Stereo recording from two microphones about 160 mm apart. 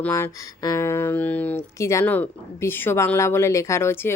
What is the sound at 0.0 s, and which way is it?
Speech, 20° left (ahead or behind).